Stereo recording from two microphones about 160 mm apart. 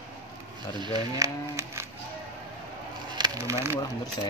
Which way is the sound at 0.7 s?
25° right (ahead or behind).